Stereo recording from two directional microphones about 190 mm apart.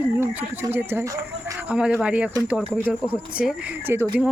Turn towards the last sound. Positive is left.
turn(degrees=-10)  # may be behind; listen again after turning